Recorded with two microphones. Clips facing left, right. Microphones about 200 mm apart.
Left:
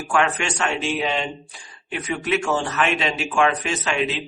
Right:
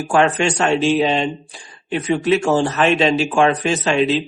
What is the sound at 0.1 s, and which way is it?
Speech, 35° right (ahead or behind).